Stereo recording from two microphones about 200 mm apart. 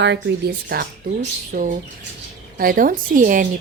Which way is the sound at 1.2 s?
40° right (ahead or behind).